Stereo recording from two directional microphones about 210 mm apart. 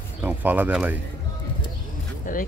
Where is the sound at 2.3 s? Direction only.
40° left (ahead or behind).